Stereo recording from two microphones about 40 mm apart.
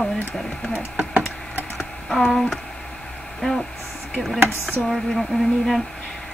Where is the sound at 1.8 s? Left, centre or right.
Centre.